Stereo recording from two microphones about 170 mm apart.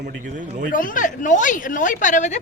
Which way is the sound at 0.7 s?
50° left (ahead or behind).